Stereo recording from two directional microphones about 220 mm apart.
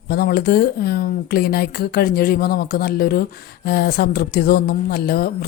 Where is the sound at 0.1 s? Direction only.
45° left (ahead or behind).